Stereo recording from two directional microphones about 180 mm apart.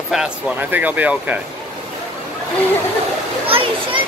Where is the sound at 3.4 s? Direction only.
30° right (ahead or behind).